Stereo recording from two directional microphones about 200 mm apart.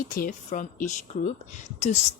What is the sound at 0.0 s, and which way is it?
A woman's voice, 45° left (ahead or behind).